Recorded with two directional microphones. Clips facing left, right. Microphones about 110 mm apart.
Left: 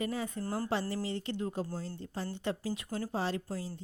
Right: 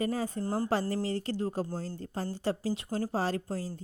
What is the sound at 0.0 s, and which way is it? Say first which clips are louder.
Speech: right 4 dB; 40° right (ahead or behind).